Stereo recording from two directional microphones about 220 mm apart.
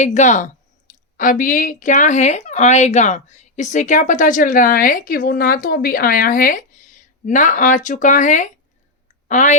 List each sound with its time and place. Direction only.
0.0 s speech: 30° left (ahead or behind)